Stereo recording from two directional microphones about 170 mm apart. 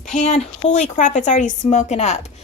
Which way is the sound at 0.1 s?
40° left (ahead or behind).